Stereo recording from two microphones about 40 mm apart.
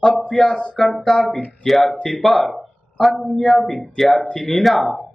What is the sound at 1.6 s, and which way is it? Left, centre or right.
A man's voice, centre.